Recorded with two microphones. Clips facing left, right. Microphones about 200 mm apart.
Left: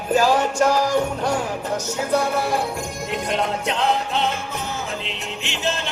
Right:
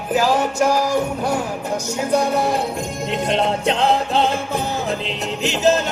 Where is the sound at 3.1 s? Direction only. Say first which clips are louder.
Right 4 dB; 25° right (ahead or behind).